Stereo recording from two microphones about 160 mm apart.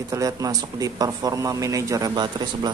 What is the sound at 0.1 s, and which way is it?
Speech, 20° right (ahead or behind).